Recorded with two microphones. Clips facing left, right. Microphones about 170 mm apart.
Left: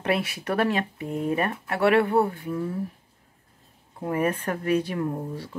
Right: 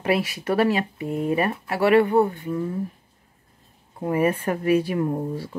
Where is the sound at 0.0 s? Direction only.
Centre (ahead or behind).